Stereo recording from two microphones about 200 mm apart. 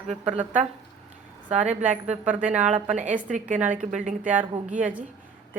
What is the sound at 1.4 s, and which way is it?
Speech, 35° right (ahead or behind).